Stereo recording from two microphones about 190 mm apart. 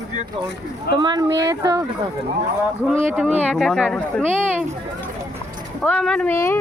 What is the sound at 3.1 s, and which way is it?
Speech, 5° right (ahead or behind).